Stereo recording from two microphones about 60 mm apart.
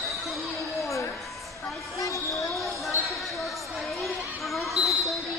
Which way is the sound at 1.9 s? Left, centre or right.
Left.